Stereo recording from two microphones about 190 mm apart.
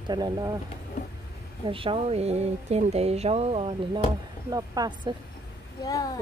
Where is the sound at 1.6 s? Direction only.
30° right (ahead or behind).